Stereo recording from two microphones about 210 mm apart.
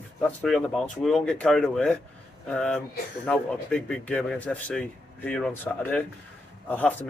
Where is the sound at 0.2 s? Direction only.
5° left (ahead or behind).